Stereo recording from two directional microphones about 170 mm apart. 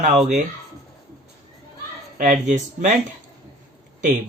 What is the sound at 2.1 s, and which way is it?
Speech, 50° right (ahead or behind).